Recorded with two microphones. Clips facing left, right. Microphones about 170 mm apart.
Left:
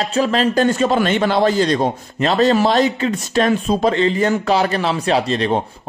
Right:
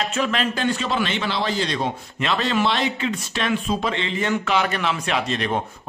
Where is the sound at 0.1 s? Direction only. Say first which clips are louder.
Left 7 dB; 35° left (ahead or behind).